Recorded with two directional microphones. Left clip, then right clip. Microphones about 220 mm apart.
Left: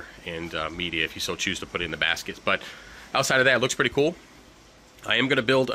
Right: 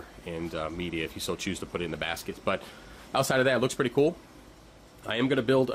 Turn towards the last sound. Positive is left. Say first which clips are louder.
# left 3 dB
turn(degrees=5)  # may be behind; listen again after turning